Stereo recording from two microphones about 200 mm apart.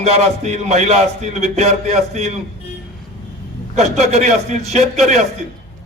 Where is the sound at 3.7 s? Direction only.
35° right (ahead or behind).